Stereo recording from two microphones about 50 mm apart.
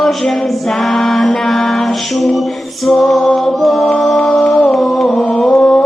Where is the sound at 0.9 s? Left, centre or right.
Centre.